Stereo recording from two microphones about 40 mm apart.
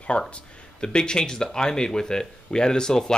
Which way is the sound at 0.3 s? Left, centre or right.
Left.